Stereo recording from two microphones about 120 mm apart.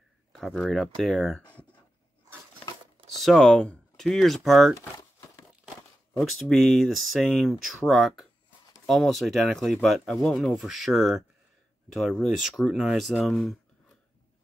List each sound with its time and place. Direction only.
0.3 s speech: 5° left (ahead or behind)
3.2 s speech: centre (ahead or behind)
4.7 s crumpling: 30° left (ahead or behind)
6.5 s speech: centre (ahead or behind)